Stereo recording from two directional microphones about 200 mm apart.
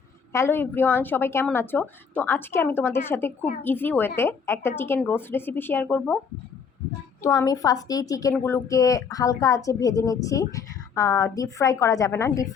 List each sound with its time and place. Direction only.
0.3 s a woman's voice: 10° left (ahead or behind)
7.2 s a woman's voice: 20° left (ahead or behind)